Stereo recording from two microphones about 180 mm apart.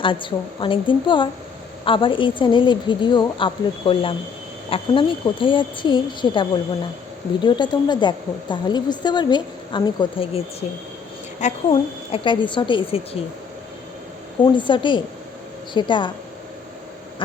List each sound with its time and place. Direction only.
0.0 s a woman's voice: 30° left (ahead or behind)
14.4 s a woman's voice: 25° left (ahead or behind)